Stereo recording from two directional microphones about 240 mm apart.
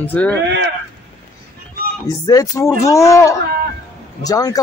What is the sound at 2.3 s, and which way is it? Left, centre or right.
Speech, centre.